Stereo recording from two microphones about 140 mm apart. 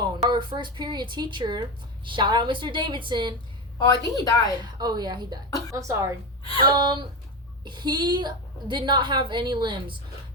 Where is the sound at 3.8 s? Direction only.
30° left (ahead or behind).